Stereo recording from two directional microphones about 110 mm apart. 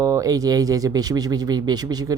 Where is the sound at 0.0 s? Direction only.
30° right (ahead or behind).